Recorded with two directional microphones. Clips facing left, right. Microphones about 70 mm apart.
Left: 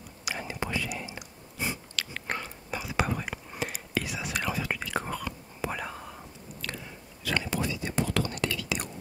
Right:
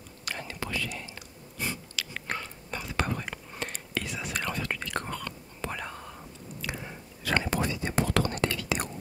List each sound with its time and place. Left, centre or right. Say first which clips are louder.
0.2 s whispering: left 2 dB; centre
2.0 s biting: left 1 dB; centre
2.4 s whispering: left 2 dB; centre
6.6 s biting: right 2 dB; centre
7.2 s whispering: right 2 dB; right